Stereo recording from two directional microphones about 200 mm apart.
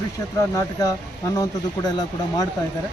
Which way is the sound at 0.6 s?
15° left (ahead or behind).